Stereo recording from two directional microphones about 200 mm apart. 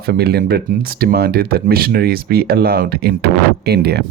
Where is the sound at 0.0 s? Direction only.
50° right (ahead or behind).